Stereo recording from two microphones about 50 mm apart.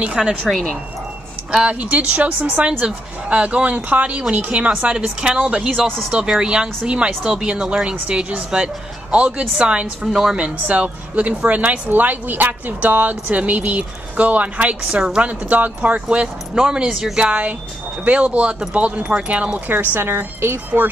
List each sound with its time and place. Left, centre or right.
0.0 s speech: centre
0.5 s speech: centre
1.7 s a woman's voice: right
19.7 s a woman's voice: right
20.3 s speech: right